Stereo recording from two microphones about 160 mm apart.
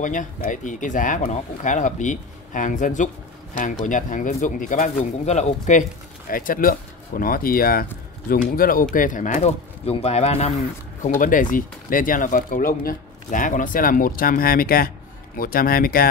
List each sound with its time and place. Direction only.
0.0 s speech: 55° left (ahead or behind)
11.1 s speech: 55° left (ahead or behind)